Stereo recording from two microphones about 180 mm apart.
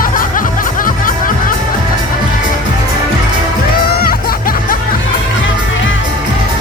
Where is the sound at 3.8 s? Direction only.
55° left (ahead or behind).